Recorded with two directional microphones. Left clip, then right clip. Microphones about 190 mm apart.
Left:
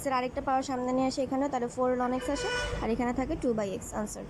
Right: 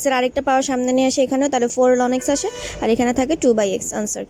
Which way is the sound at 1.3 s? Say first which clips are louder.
Right 12 dB; 55° right (ahead or behind).